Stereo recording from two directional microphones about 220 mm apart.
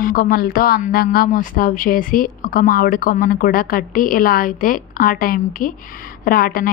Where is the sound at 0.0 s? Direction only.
40° left (ahead or behind).